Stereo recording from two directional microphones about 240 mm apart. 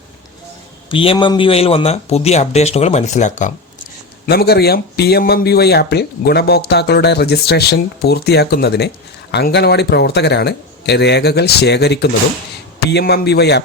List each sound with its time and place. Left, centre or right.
0.9 s a man's voice: left
4.3 s speech: left